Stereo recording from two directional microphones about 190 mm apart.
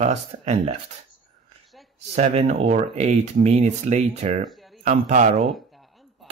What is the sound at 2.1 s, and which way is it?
Speech, 35° right (ahead or behind).